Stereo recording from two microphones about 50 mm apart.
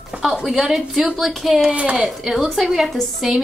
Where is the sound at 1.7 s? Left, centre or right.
Right.